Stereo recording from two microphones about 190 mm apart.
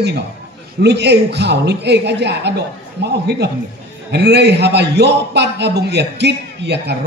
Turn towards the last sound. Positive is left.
turn(degrees=-60)  # may be behind; listen again after turning